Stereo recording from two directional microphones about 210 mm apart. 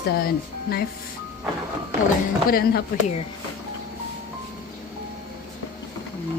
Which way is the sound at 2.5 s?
45° left (ahead or behind).